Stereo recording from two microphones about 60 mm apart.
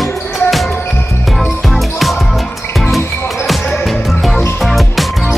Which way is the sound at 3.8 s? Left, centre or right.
Centre.